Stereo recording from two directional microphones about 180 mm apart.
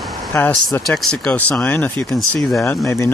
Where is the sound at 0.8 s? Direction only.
Centre (ahead or behind).